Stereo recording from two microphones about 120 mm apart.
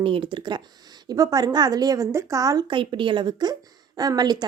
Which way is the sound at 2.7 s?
45° right (ahead or behind).